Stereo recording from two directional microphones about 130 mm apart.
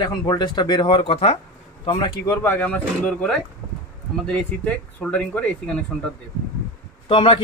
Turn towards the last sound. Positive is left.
turn(degrees=45)  # may be behind; listen again after turning